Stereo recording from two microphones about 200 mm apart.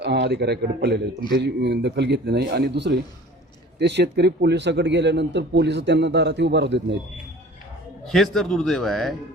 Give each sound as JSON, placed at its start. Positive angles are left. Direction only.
{"t": 0.0, "sound": "a man's voice", "side_deg": -55}
{"t": 8.0, "sound": "a man's voice", "side_deg": 0}